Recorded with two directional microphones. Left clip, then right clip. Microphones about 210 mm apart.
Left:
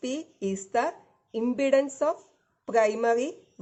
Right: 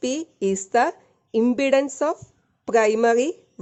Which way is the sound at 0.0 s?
50° right (ahead or behind).